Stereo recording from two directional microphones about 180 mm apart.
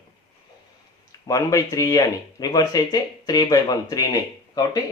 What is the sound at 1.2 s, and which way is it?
A man's voice, 20° left (ahead or behind).